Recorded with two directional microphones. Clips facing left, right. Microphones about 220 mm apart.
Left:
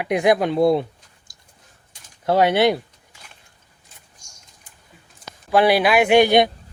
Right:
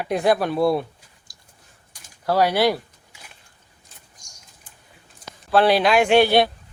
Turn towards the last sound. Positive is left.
turn(degrees=15)  # may be behind; listen again after turning